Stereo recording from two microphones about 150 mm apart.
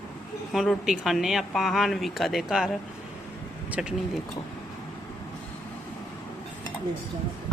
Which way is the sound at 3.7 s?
5° right (ahead or behind).